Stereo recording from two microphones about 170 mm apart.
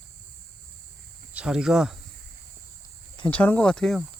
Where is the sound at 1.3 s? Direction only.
5° right (ahead or behind).